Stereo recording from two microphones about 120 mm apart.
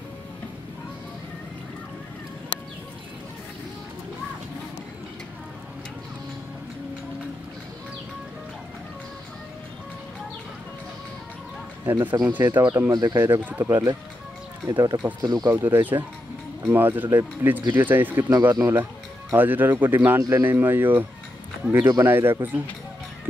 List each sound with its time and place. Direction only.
11.8 s speech: 15° right (ahead or behind)
12.6 s speech: 25° right (ahead or behind)
15.2 s speech: 35° right (ahead or behind)
15.5 s speech: 15° right (ahead or behind)